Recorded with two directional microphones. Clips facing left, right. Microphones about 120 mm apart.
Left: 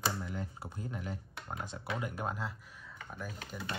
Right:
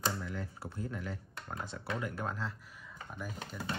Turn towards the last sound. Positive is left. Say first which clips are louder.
# right 1 dB
turn(degrees=0)  # may be behind; listen again after turning